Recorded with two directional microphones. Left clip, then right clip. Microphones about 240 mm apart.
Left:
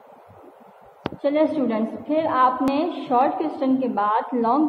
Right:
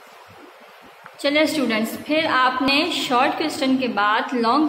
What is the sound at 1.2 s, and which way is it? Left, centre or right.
A woman's voice, centre.